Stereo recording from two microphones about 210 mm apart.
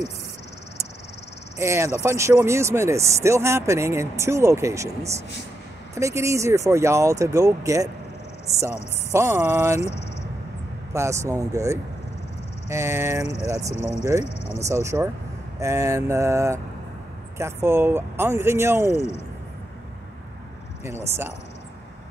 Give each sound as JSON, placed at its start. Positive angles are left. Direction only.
{"t": 1.6, "sound": "speech", "side_deg": -15}
{"t": 9.1, "sound": "speech", "side_deg": -10}
{"t": 10.9, "sound": "speech", "side_deg": -15}
{"t": 18.9, "sound": "speech", "side_deg": 30}
{"t": 20.8, "sound": "speech", "side_deg": -10}